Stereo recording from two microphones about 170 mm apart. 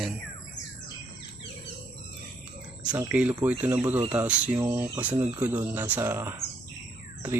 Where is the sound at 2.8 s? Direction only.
10° right (ahead or behind).